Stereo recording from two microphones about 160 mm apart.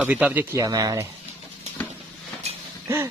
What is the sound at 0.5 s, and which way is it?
Speech, 20° right (ahead or behind).